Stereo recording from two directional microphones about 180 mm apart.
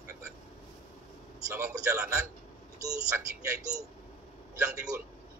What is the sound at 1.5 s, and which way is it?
A man's voice, 10° right (ahead or behind).